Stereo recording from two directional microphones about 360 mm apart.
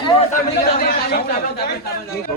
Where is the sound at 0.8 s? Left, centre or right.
Left.